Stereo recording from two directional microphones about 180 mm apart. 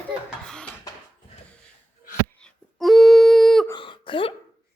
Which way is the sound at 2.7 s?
Centre (ahead or behind).